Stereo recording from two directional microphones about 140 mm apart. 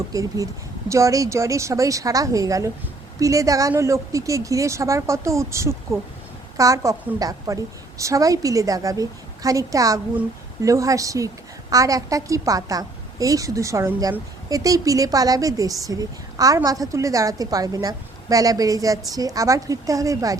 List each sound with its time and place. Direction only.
0.1 s a woman's voice: 25° right (ahead or behind)